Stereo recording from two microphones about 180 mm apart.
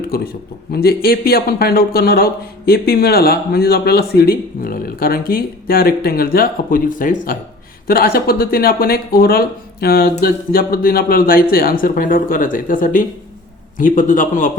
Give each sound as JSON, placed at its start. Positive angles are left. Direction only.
{"t": 0.1, "sound": "a man's voice", "side_deg": 55}